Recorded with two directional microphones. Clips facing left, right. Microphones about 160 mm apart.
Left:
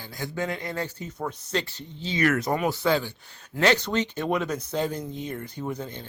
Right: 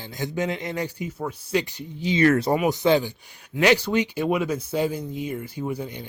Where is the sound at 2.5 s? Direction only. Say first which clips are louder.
Right 4 dB; 15° right (ahead or behind).